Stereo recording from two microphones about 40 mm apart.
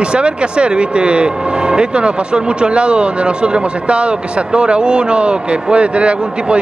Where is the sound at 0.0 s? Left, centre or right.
Right.